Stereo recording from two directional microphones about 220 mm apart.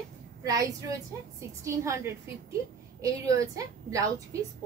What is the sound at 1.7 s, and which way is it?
A woman's voice, 15° right (ahead or behind).